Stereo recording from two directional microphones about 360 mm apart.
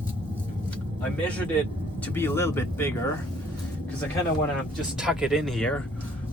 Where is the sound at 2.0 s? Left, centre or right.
Centre.